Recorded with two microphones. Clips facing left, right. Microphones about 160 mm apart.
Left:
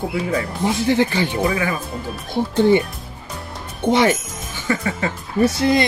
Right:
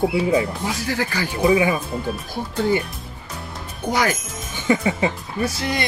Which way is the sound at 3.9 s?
25° left (ahead or behind).